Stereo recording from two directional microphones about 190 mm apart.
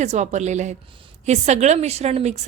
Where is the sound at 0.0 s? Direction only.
40° right (ahead or behind).